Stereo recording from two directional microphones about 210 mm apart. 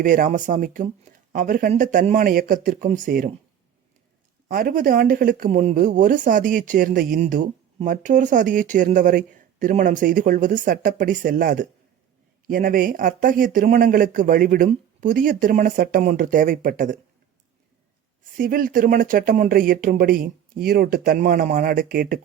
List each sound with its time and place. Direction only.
0.0 s speech: 40° right (ahead or behind)
4.4 s speech: 40° right (ahead or behind)
18.3 s speech: 40° right (ahead or behind)